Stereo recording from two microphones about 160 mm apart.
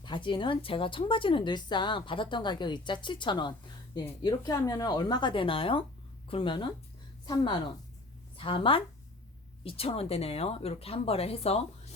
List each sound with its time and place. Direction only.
0.0 s a woman's voice: 30° left (ahead or behind)